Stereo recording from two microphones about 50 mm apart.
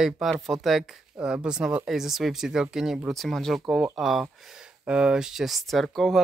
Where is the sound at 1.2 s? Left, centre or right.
Centre.